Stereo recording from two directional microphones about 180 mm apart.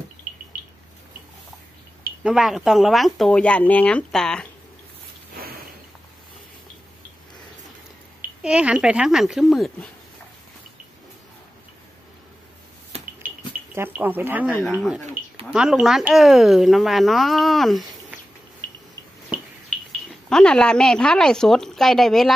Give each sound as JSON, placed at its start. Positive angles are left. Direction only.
{"t": 2.2, "sound": "speech", "side_deg": 0}
{"t": 8.4, "sound": "speech", "side_deg": -5}
{"t": 12.9, "sound": "a sound", "side_deg": -35}
{"t": 13.7, "sound": "speech", "side_deg": -10}
{"t": 14.5, "sound": "speech", "side_deg": 0}
{"t": 20.2, "sound": "speech", "side_deg": 5}